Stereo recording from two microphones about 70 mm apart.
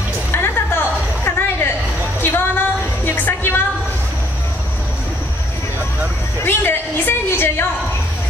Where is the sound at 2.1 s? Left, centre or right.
Left.